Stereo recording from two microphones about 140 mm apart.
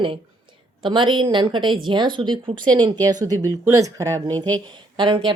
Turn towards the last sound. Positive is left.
turn(degrees=-35)  # may be behind; listen again after turning